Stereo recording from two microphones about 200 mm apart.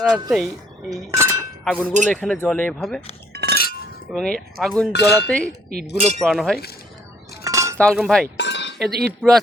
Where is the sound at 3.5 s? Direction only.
50° left (ahead or behind).